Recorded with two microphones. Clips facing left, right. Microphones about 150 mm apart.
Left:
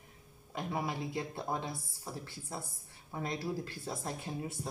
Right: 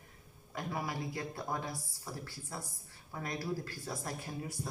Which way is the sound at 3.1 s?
25° left (ahead or behind).